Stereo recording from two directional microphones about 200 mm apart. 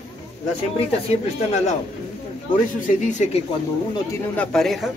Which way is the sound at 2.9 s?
35° left (ahead or behind).